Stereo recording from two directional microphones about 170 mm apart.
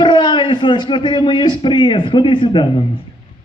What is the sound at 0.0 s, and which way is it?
Speech, 30° left (ahead or behind).